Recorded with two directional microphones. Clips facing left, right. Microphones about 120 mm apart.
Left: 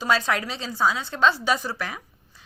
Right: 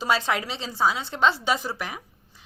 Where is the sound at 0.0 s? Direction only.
25° right (ahead or behind).